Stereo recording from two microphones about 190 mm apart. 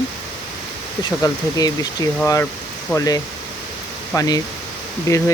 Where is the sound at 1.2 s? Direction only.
20° left (ahead or behind).